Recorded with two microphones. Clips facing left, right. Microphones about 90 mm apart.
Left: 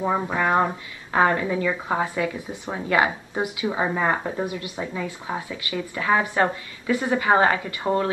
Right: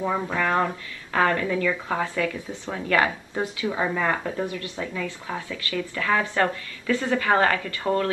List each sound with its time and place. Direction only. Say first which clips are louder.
0.0 s speech: left 2 dB; 20° left (ahead or behind)